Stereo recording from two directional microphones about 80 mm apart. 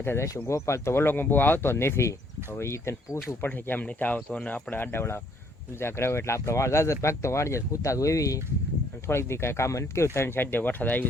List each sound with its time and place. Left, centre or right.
0.0 s speech: left
9.0 s speech: left